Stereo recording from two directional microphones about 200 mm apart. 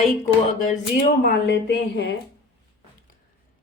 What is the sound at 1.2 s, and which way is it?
Speech, 55° left (ahead or behind).